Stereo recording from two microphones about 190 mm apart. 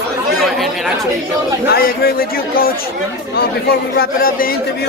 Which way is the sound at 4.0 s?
50° left (ahead or behind).